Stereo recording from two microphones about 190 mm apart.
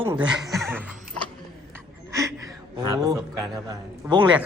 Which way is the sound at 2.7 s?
20° right (ahead or behind).